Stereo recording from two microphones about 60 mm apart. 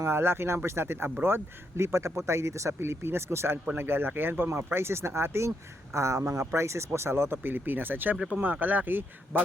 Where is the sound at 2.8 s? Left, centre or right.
Right.